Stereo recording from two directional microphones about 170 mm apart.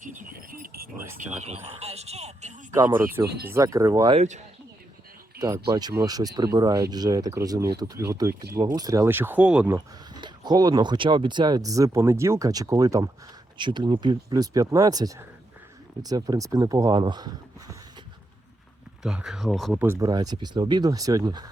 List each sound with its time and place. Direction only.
0.0 s a sound: 55° right (ahead or behind)
1.2 s speech: 40° right (ahead or behind)
2.7 s speech: 15° right (ahead or behind)
4.1 s speech: 40° right (ahead or behind)
5.4 s speech: 20° right (ahead or behind)
9.7 s speech: 25° right (ahead or behind)
19.0 s speech: 5° right (ahead or behind)
19.8 s speech: 15° right (ahead or behind)